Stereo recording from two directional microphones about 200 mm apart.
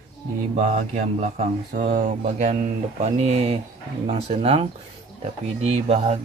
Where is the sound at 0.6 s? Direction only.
35° right (ahead or behind).